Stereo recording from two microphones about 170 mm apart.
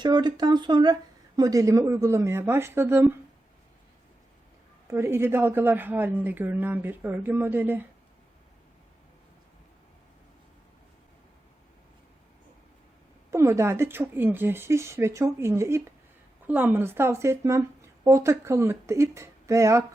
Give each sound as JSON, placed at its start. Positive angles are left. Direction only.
{"t": 0.0, "sound": "a woman's voice", "side_deg": -25}
{"t": 4.9, "sound": "a woman's voice", "side_deg": -15}
{"t": 13.3, "sound": "a woman's voice", "side_deg": -15}